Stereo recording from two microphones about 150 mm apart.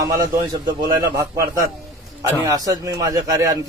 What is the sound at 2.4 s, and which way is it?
Speech, 25° right (ahead or behind).